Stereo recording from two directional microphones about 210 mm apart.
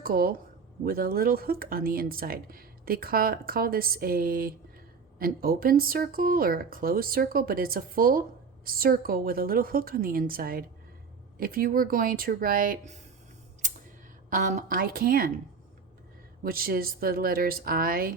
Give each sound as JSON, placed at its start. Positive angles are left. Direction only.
{"t": 0.0, "sound": "speech", "side_deg": -45}
{"t": 14.3, "sound": "a woman's voice", "side_deg": -40}
{"t": 16.4, "sound": "speech", "side_deg": -45}